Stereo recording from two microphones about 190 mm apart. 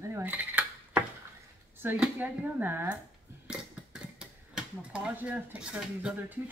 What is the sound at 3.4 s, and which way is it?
Dishes, 5° right (ahead or behind).